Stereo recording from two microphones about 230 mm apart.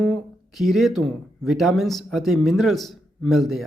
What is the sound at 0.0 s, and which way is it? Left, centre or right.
Speech, centre.